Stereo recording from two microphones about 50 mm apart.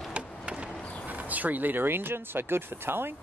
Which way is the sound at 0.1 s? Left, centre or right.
Right.